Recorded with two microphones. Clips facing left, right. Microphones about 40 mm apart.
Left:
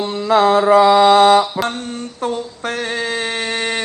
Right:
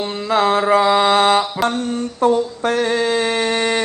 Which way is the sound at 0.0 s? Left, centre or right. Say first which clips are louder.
Left 2 dB; right.